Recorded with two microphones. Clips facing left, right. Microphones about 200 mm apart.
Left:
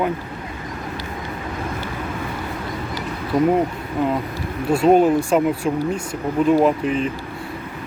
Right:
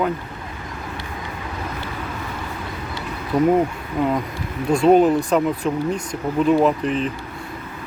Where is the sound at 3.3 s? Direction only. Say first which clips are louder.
Even; 10° left (ahead or behind).